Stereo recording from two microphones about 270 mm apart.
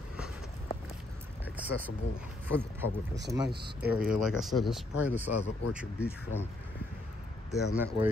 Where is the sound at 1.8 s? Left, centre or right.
Centre.